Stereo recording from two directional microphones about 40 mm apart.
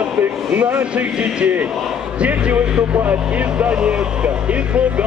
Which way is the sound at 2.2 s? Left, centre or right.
Right.